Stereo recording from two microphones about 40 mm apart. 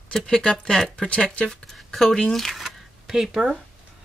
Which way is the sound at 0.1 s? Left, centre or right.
Left.